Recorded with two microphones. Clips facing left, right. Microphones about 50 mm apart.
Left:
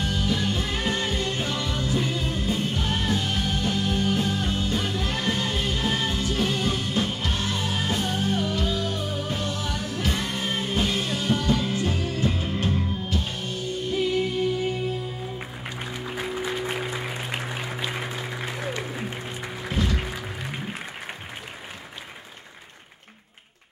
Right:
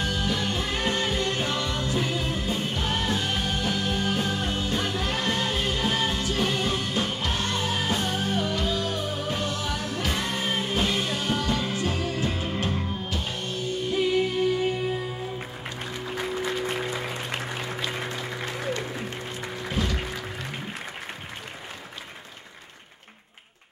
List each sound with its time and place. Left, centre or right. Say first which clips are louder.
0.0 s music: left 1 dB; centre
15.8 s music: even; centre